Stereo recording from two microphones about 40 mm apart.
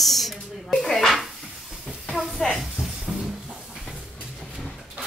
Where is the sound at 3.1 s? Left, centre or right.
Right.